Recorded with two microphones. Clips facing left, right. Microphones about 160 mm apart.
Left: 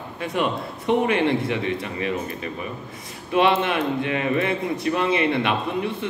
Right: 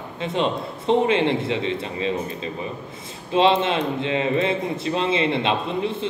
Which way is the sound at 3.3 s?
25° right (ahead or behind).